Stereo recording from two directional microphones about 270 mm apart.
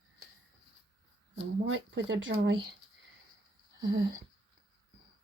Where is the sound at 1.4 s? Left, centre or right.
Right.